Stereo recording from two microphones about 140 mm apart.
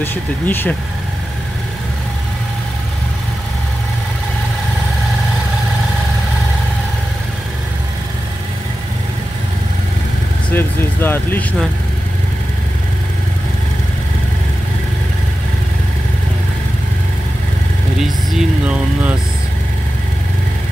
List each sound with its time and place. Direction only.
0.0 s speech: 15° left (ahead or behind)
10.5 s speech: 15° left (ahead or behind)
18.0 s speech: 5° right (ahead or behind)